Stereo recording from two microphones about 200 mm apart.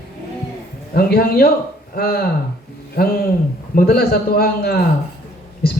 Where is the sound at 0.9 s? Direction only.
50° left (ahead or behind).